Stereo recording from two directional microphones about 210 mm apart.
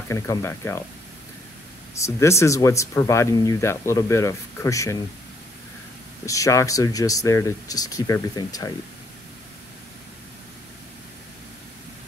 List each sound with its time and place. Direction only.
0.1 s speech: 15° left (ahead or behind)
2.0 s speech: 15° left (ahead or behind)
6.2 s speech: 15° left (ahead or behind)